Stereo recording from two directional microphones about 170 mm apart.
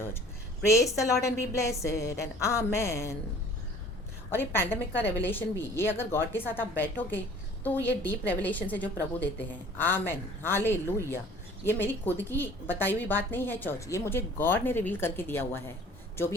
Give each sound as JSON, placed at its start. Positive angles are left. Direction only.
{"t": 0.6, "sound": "a woman's voice", "side_deg": 15}
{"t": 4.3, "sound": "a woman's voice", "side_deg": 15}